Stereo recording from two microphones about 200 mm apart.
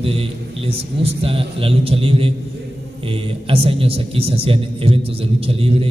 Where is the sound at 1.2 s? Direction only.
30° right (ahead or behind).